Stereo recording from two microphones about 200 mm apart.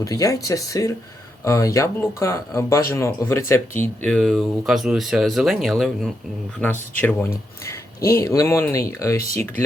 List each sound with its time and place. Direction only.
0.0 s speech: 15° left (ahead or behind)